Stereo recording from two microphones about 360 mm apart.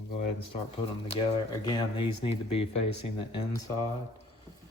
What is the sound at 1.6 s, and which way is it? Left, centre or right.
Speech, centre.